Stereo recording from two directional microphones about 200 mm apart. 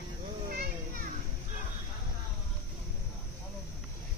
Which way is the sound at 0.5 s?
45° right (ahead or behind).